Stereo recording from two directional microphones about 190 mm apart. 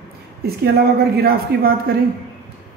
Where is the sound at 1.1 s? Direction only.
50° right (ahead or behind).